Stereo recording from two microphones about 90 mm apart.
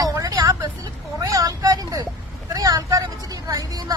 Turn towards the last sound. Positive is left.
turn(degrees=-40)  # may be behind; listen again after turning